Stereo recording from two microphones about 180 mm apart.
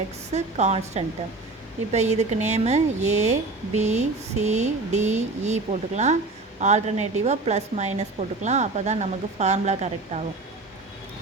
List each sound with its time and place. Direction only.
0.3 s a woman's voice: 40° right (ahead or behind)